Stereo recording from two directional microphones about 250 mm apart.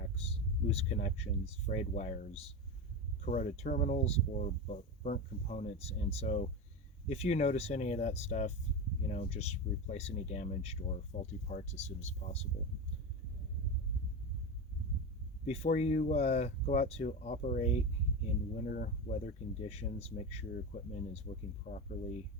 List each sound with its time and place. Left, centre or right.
0.7 s speech: left
15.4 s speech: left